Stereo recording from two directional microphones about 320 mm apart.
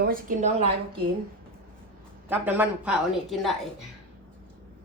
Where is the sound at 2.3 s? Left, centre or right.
Centre.